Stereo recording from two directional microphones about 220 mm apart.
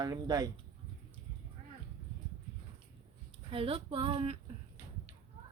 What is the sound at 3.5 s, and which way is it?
Speech, 25° right (ahead or behind).